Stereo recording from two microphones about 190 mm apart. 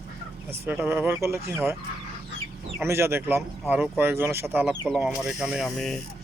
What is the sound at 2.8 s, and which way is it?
Speech, 15° right (ahead or behind).